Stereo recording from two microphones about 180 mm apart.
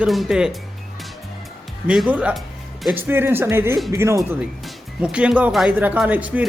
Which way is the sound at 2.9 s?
10° right (ahead or behind).